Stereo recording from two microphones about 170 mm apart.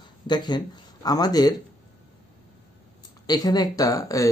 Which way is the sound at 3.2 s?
25° left (ahead or behind).